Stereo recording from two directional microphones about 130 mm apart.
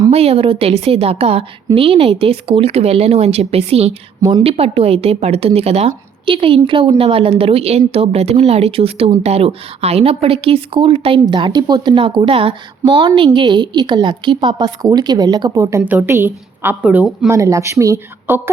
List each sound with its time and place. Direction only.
0.1 s a woman's voice: 50° right (ahead or behind)
4.2 s speech: 30° right (ahead or behind)
4.4 s a woman's voice: 50° right (ahead or behind); by 12.0 s 30° right (ahead or behind)
12.0 s a woman's voice: 45° right (ahead or behind); by 17.3 s 10° right (ahead or behind)
17.3 s speech: 25° right (ahead or behind)